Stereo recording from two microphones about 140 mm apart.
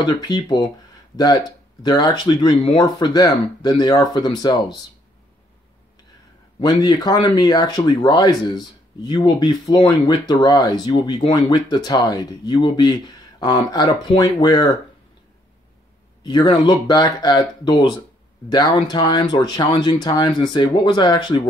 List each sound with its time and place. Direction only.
0.0 s speech: 30° left (ahead or behind)
6.6 s speech: 30° left (ahead or behind)
16.3 s speech: 30° left (ahead or behind)